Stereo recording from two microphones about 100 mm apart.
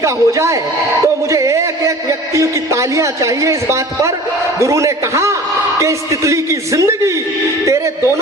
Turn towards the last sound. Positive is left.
turn(degrees=-30)  # may be behind; listen again after turning